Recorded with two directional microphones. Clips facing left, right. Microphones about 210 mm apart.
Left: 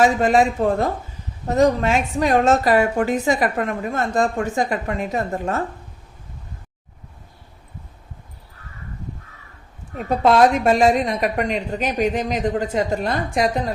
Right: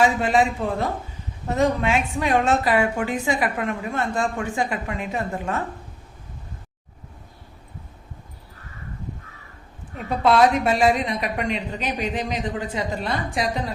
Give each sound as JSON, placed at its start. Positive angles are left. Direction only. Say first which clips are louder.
{"t": 0.0, "sound": "a woman's voice", "louder": "left 3 dB", "side_deg": 45}
{"t": 10.1, "sound": "a woman's voice", "louder": "left 3 dB", "side_deg": 45}